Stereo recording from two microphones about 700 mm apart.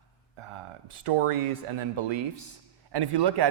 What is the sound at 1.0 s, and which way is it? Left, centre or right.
A man's voice, right.